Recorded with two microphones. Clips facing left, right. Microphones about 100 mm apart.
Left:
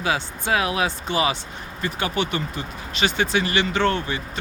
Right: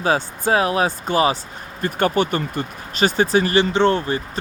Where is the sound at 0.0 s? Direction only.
40° right (ahead or behind).